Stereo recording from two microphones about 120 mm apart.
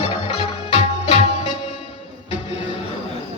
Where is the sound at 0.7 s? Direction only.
55° left (ahead or behind).